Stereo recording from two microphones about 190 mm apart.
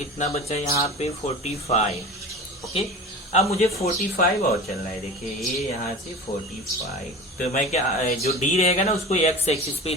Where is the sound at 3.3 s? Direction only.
35° left (ahead or behind).